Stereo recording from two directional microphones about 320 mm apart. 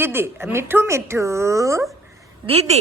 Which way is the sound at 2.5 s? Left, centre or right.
Centre.